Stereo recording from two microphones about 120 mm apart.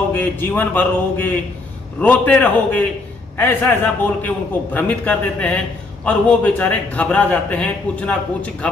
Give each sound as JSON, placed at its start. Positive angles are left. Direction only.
{"t": 0.1, "sound": "a man's voice", "side_deg": 15}